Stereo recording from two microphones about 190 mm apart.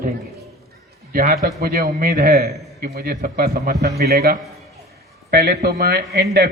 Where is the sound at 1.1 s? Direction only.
50° right (ahead or behind).